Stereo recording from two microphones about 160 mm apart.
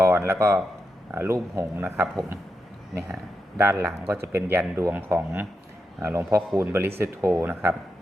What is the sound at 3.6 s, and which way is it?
Speech, 15° right (ahead or behind).